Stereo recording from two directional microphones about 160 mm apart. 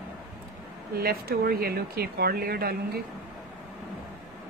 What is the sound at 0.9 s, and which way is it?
Speech, 75° right (ahead or behind).